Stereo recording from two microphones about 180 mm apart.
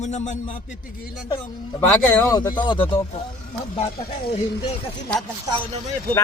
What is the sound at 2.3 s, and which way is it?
Speech, 20° left (ahead or behind).